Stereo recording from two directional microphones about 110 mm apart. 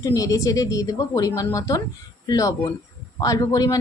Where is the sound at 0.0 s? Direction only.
30° left (ahead or behind).